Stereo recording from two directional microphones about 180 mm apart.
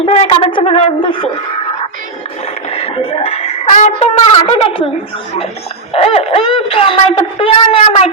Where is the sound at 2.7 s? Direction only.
35° left (ahead or behind).